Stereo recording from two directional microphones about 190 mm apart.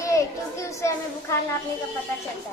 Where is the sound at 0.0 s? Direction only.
15° left (ahead or behind).